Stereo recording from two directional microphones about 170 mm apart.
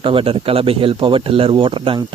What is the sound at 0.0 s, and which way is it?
Speech, 30° right (ahead or behind).